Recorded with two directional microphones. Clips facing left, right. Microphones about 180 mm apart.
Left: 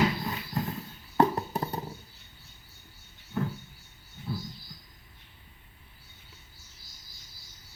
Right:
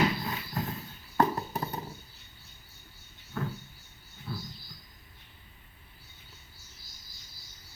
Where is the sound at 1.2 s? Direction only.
20° left (ahead or behind).